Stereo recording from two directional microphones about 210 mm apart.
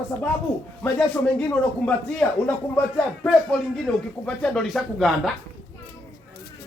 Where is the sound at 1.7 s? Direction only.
5° left (ahead or behind).